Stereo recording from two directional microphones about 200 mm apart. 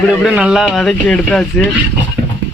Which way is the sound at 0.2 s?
5° right (ahead or behind).